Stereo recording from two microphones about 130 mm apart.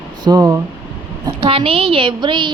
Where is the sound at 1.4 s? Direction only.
45° right (ahead or behind).